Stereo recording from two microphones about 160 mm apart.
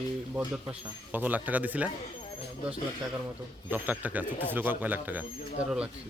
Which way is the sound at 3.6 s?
10° right (ahead or behind).